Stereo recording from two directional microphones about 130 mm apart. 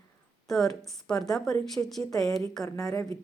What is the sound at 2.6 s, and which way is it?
Speech, 25° left (ahead or behind).